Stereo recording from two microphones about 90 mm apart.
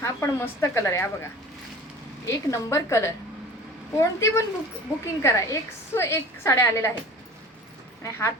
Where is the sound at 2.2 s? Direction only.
35° left (ahead or behind).